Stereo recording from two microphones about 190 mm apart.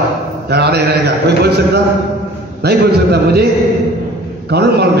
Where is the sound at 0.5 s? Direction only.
60° right (ahead or behind).